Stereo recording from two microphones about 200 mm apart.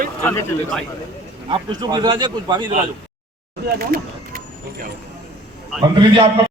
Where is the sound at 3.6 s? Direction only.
50° right (ahead or behind).